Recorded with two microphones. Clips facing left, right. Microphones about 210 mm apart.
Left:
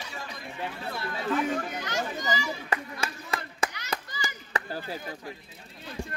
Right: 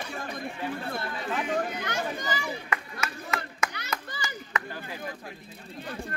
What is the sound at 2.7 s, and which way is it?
Chop, 30° left (ahead or behind).